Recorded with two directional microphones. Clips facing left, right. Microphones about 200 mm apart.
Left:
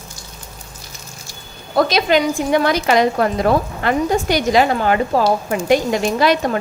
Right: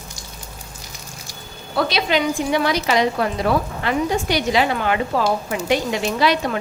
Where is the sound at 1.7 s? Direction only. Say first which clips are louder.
Left 5 dB; 45° left (ahead or behind).